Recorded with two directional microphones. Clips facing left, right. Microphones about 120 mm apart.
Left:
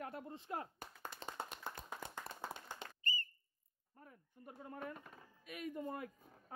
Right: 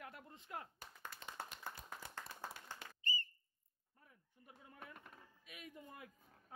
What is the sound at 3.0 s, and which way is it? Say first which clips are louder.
Whistle: right 1 dB; 45° left (ahead or behind).